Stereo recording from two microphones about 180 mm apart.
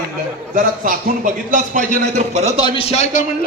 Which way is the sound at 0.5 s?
50° right (ahead or behind).